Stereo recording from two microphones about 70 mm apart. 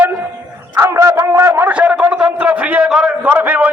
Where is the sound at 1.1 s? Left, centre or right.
Right.